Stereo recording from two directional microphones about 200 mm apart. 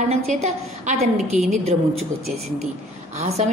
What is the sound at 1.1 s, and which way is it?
Speech, centre (ahead or behind).